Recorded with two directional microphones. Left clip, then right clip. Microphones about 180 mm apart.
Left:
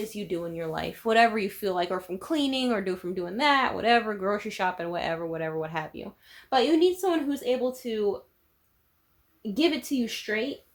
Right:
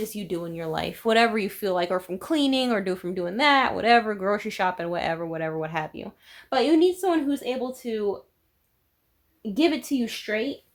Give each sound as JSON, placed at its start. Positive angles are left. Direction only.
{"t": 0.1, "sound": "speech", "side_deg": -45}
{"t": 9.6, "sound": "speech", "side_deg": -25}